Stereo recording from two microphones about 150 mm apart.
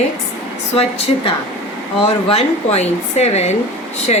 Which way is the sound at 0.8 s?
40° left (ahead or behind).